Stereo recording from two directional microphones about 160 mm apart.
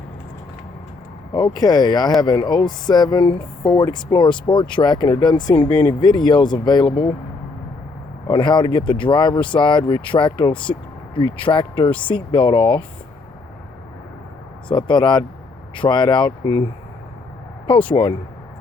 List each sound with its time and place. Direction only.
1.3 s speech: 25° left (ahead or behind)
8.3 s speech: 30° left (ahead or behind)
14.7 s speech: 30° left (ahead or behind)
18.0 s speech: 30° left (ahead or behind)